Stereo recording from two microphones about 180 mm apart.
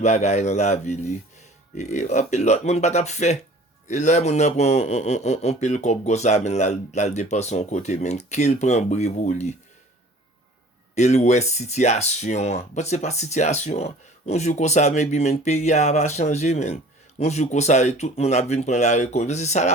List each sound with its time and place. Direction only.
0.0 s speech: 40° left (ahead or behind)
10.9 s speech: 40° left (ahead or behind)